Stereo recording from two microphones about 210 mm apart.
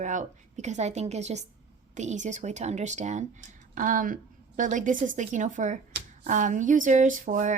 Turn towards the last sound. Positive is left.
turn(degrees=-35)  # may be behind; listen again after turning